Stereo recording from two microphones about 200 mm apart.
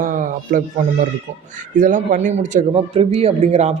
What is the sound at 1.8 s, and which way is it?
Speech, 40° right (ahead or behind).